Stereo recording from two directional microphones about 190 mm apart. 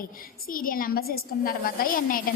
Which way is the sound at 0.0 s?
50° left (ahead or behind).